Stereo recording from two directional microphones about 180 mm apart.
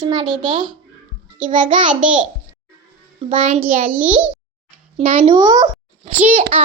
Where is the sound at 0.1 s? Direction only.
25° right (ahead or behind).